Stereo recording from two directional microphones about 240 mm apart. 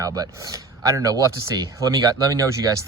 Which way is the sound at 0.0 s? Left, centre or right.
Centre.